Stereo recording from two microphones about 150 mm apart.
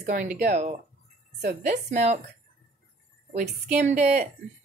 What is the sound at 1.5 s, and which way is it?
Speech, 50° right (ahead or behind).